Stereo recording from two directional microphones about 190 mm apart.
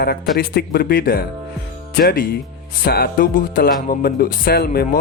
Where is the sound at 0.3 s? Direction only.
55° left (ahead or behind).